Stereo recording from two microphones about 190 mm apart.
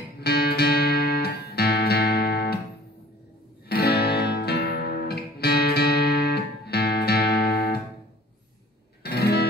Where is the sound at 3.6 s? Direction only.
55° left (ahead or behind).